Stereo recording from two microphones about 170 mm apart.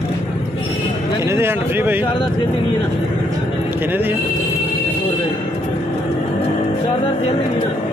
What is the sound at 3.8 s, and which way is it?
Speech, 10° right (ahead or behind).